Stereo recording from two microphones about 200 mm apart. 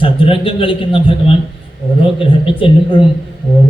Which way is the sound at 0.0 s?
25° left (ahead or behind).